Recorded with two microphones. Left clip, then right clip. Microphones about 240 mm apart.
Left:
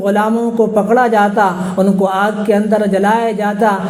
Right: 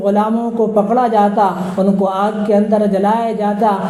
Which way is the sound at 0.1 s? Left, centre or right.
Left.